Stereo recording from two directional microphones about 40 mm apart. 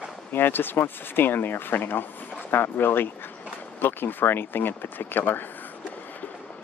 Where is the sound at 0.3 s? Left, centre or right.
Left.